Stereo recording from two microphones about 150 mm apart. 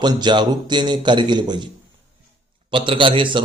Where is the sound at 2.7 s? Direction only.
35° right (ahead or behind).